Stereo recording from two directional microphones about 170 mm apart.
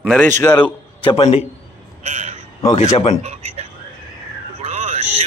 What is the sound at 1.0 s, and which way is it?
Speech, 35° left (ahead or behind).